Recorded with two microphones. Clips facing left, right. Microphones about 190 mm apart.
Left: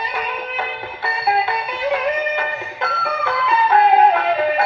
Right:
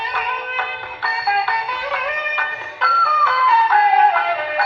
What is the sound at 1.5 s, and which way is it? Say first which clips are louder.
Music: left 4 dB; 20° left (ahead or behind).